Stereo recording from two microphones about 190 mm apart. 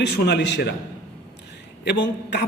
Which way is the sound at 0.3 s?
65° left (ahead or behind).